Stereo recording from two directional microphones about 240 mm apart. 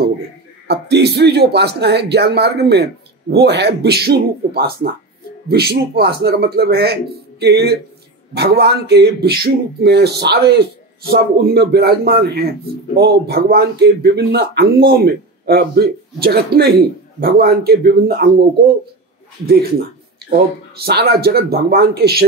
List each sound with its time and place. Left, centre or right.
0.7 s speech: right
20.8 s speech: right